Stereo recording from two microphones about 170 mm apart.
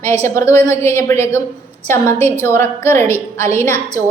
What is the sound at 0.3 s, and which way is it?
A woman's voice, 15° left (ahead or behind).